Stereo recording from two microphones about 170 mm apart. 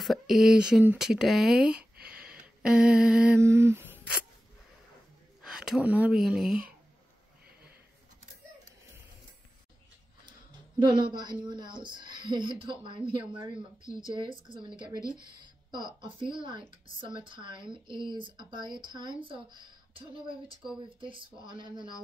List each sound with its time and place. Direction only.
0.0 s speech: centre (ahead or behind)
2.0 s a sound: 5° right (ahead or behind)
5.4 s speech: 5° right (ahead or behind)
10.8 s speech: 25° right (ahead or behind)